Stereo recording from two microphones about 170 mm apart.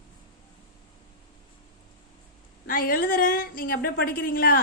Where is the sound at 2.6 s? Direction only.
55° left (ahead or behind).